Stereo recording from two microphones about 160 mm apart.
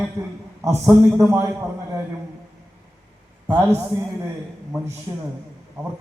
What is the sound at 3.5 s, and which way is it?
Speech, 10° right (ahead or behind).